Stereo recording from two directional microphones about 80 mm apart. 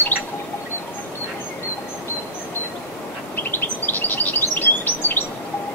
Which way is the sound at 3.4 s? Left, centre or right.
Left.